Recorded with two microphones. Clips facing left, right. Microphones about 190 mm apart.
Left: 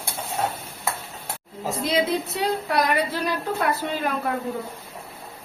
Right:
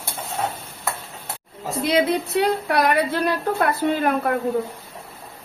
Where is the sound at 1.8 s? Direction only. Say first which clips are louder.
Right 4 dB; 60° right (ahead or behind).